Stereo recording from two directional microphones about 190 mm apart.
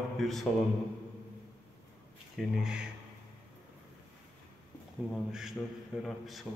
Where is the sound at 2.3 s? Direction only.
5° right (ahead or behind).